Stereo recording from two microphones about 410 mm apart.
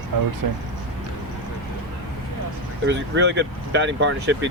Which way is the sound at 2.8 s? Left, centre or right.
Right.